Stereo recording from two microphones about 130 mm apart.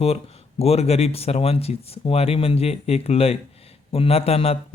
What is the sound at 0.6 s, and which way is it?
A man's voice, 50° left (ahead or behind).